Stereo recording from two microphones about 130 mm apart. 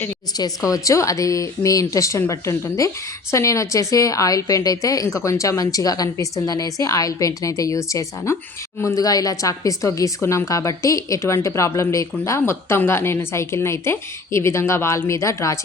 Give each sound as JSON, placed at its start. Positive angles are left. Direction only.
{"t": 0.3, "sound": "a woman's voice", "side_deg": 30}